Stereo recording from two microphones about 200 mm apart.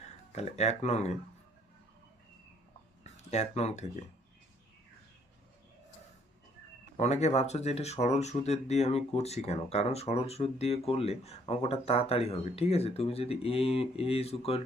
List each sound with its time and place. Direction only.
0.3 s speech: 35° left (ahead or behind)
3.0 s speech: 35° left (ahead or behind)
6.9 s speech: 35° left (ahead or behind)